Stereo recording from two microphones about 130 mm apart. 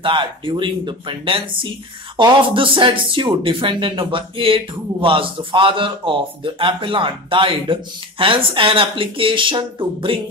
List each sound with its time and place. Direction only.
0.0 s a man's voice: 40° right (ahead or behind)